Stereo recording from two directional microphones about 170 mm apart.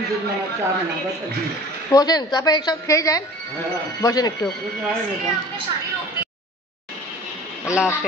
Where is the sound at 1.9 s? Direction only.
25° left (ahead or behind).